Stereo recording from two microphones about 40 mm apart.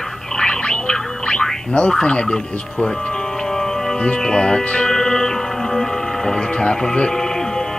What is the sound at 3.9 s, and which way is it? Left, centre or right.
Speech, left.